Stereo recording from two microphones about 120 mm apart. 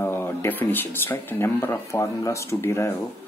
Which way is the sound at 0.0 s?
20° left (ahead or behind).